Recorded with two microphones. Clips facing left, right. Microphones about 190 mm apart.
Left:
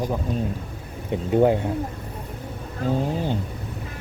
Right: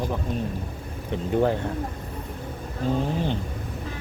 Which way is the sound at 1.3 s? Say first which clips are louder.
Left 4 dB; 15° left (ahead or behind).